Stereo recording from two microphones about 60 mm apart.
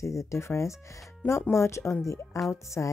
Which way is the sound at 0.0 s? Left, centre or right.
Left.